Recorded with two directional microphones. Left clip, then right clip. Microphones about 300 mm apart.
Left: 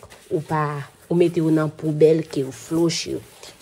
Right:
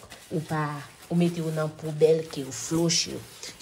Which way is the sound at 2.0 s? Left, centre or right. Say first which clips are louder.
Left 5 dB; left.